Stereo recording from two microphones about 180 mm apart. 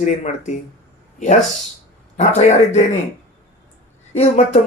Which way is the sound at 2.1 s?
40° left (ahead or behind).